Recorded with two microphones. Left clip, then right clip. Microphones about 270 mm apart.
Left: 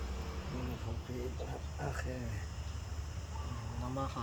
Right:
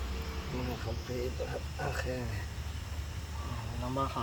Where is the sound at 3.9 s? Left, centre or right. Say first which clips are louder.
Right 6 dB; centre.